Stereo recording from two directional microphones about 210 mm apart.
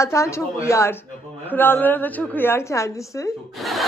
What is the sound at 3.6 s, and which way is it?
Speech, centre (ahead or behind).